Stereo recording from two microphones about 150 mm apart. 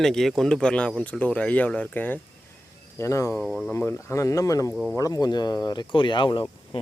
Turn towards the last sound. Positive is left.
turn(degrees=30)  # may be behind; listen again after turning